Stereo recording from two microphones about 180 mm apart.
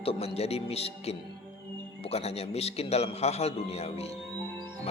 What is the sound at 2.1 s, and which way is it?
Music, 35° left (ahead or behind).